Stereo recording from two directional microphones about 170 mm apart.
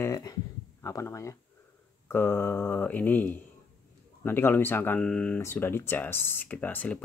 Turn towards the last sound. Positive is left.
turn(degrees=10)  # may be behind; listen again after turning